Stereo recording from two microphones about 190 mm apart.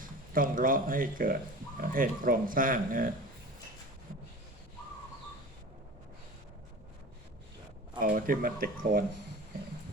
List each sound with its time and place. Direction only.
0.0 s speech: 45° right (ahead or behind)
7.9 s speech: 45° right (ahead or behind)